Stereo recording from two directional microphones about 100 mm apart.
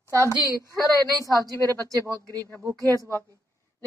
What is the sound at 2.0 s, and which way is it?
Speech, 35° right (ahead or behind).